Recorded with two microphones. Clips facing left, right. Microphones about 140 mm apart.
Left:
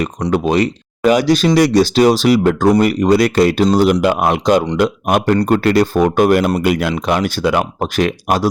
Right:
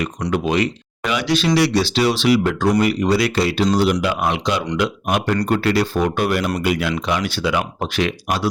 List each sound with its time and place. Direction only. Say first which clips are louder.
0.3 s speech: left 4 dB; 40° left (ahead or behind)